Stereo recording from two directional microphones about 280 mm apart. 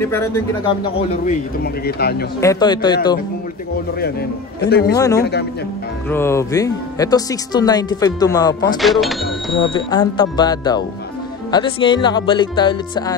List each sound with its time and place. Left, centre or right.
0.0 s speech: centre
0.8 s speech: left
2.4 s speech: centre
4.6 s speech: left
4.9 s speech: centre
8.8 s speech: centre
9.6 s speech: centre